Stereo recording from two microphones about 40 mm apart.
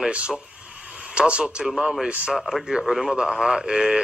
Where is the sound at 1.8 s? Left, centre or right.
Centre.